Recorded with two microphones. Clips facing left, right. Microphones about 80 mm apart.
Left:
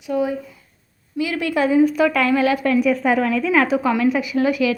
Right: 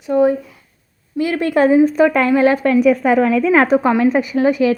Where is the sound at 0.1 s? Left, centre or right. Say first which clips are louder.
Right 7 dB; right.